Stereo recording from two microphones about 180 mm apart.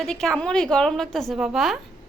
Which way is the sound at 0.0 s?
5° left (ahead or behind).